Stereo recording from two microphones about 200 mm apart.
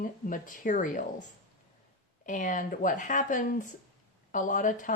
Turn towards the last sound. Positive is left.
turn(degrees=40)  # may be behind; listen again after turning